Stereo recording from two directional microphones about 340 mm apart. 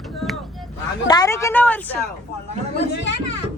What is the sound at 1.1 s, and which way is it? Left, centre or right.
Speech, centre.